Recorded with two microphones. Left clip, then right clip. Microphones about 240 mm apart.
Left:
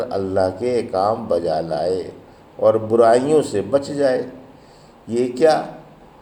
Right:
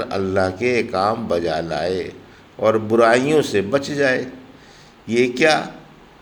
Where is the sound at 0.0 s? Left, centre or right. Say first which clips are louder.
Left 1 dB; right.